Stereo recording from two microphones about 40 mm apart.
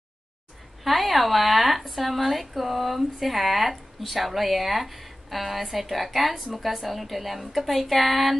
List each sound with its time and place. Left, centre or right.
0.8 s speech: centre